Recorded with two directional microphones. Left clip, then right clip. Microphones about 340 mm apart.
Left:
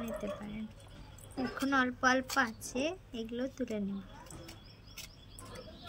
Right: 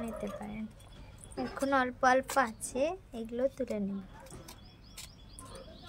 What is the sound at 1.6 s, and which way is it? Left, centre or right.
A woman's voice, centre.